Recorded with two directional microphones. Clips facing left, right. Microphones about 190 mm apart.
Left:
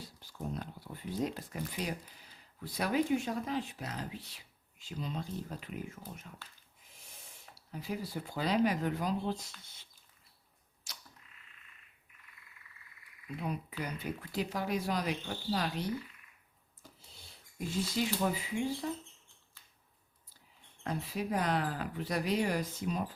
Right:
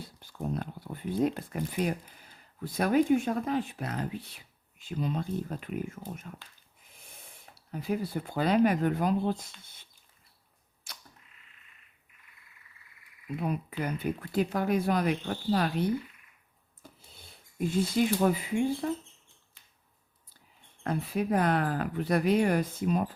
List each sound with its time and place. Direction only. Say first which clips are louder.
0.0 s speech: right 5 dB; 55° right (ahead or behind)
10.9 s a sound: right 3 dB; 55° right (ahead or behind)
13.4 s speech: right 6 dB; 55° right (ahead or behind)
16.8 s a sound: right 4 dB; 55° right (ahead or behind)
17.7 s speech: right 7 dB; 55° right (ahead or behind)
20.8 s speech: right 6 dB; 55° right (ahead or behind)